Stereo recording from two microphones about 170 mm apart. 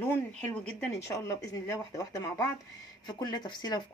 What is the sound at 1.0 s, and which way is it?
A woman's voice, 20° left (ahead or behind).